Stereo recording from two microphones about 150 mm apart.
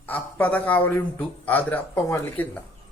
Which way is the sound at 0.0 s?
10° left (ahead or behind).